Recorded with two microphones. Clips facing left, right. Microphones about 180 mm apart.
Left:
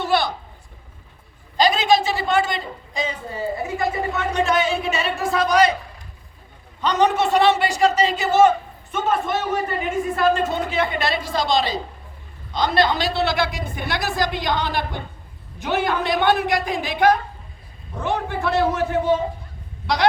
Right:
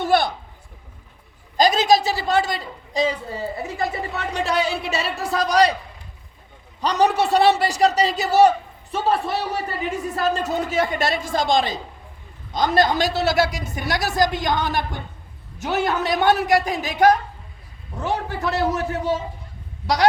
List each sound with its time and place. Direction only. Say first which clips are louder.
0.0 s a sound: right 2 dB; 50° right (ahead or behind)
1.5 s a man's voice: right 1 dB; 40° right (ahead or behind)
6.8 s a man's voice: even; 35° right (ahead or behind)